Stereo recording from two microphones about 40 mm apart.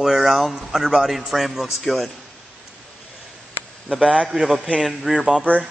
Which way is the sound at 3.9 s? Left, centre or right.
Centre.